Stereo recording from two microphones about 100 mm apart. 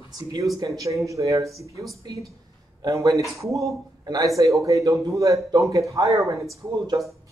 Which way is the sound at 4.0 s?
45° right (ahead or behind).